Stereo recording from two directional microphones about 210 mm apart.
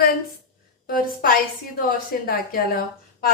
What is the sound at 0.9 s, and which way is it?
A woman's voice, 45° left (ahead or behind).